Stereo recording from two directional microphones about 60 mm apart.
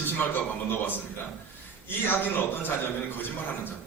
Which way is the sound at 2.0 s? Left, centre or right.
Left.